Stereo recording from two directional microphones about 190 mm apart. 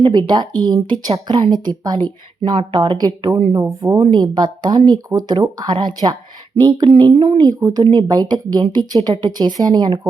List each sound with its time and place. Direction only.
0.0 s speech: 20° right (ahead or behind)
7.4 s speech: 20° right (ahead or behind)